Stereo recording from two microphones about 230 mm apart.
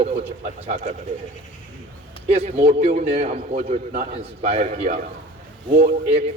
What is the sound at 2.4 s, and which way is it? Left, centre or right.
A man's voice, right.